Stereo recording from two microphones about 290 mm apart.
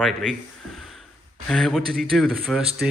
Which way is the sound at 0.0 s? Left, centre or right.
Centre.